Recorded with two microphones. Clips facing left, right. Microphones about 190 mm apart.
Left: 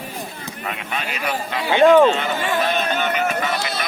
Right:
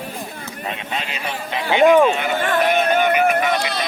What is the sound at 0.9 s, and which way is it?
Speech, 20° right (ahead or behind).